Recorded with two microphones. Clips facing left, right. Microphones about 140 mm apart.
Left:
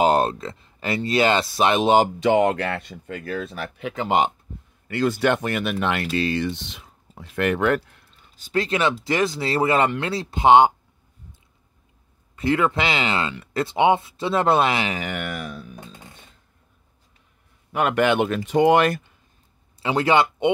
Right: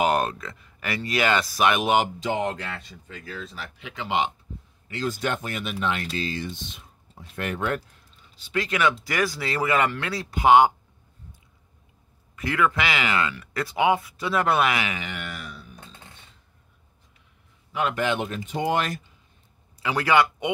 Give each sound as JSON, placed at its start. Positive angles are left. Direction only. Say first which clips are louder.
{"t": 0.0, "sound": "speech", "louder": "left 4 dB", "side_deg": 30}
{"t": 2.1, "sound": "speech", "louder": "left 8 dB", "side_deg": 70}
{"t": 4.8, "sound": "speech", "louder": "left 7 dB", "side_deg": 65}
{"t": 8.4, "sound": "speech", "louder": "left 4 dB", "side_deg": 40}
{"t": 8.6, "sound": "speech", "louder": "even", "side_deg": 30}
{"t": 12.4, "sound": "speech", "louder": "left 3 dB", "side_deg": 30}
{"t": 15.0, "sound": "a sound", "louder": "left 6 dB", "side_deg": 50}
{"t": 17.7, "sound": "speech", "louder": "left 6 dB", "side_deg": 60}
{"t": 19.8, "sound": "speech", "louder": "left 2 dB", "side_deg": 25}